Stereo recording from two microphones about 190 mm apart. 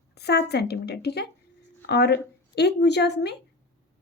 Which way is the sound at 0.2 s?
60° left (ahead or behind).